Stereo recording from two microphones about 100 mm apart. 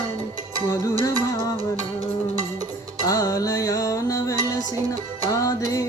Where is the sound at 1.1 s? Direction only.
40° right (ahead or behind).